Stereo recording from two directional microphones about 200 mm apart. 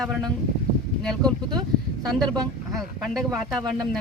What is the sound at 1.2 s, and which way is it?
Speech, 20° right (ahead or behind).